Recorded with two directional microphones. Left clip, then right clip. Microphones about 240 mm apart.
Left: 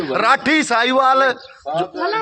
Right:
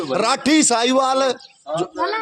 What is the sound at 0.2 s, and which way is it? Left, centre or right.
A man's voice, right.